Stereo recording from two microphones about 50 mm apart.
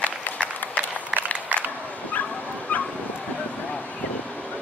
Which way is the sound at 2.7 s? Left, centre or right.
Left.